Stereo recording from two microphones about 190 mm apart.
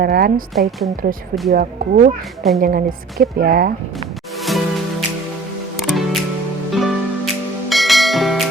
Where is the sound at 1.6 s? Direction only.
55° right (ahead or behind).